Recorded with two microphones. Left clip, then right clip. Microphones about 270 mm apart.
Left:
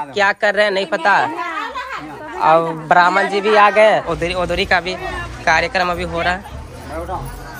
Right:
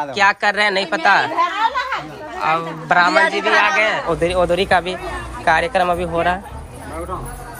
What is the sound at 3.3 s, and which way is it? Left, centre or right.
Speech, centre.